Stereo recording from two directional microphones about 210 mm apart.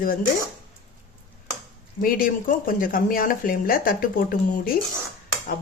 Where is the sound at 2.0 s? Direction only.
40° left (ahead or behind).